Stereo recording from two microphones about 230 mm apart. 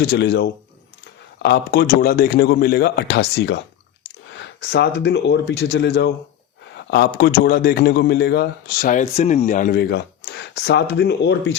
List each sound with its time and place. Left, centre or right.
0.1 s a man's voice: left
4.3 s a sound: left
4.9 s a man's voice: left